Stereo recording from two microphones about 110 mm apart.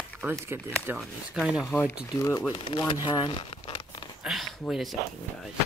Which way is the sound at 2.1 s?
30° left (ahead or behind).